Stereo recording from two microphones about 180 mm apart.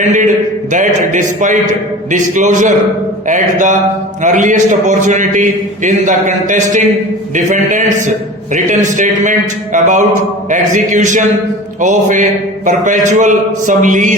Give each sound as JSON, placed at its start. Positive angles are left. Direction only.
{"t": 0.7, "sound": "a man's voice", "side_deg": -45}